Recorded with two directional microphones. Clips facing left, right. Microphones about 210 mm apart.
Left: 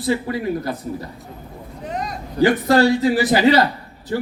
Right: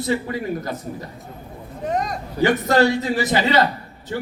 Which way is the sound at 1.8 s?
45° right (ahead or behind).